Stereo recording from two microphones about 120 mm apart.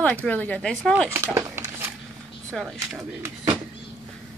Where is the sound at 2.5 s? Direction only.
Centre (ahead or behind).